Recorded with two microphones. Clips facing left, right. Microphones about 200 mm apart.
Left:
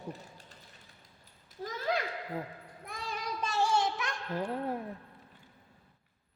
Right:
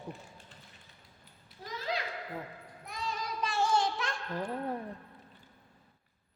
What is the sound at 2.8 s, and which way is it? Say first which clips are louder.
Child singing: right 1 dB; 50° left (ahead or behind).